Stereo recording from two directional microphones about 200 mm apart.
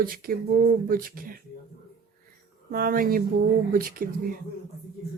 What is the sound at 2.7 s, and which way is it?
Speech, 45° right (ahead or behind).